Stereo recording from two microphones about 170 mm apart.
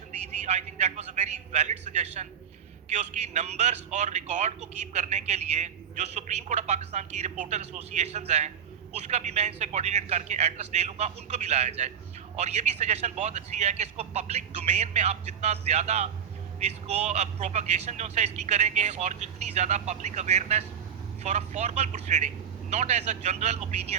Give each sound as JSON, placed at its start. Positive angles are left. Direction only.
{"t": 0.4, "sound": "a man's voice", "side_deg": -40}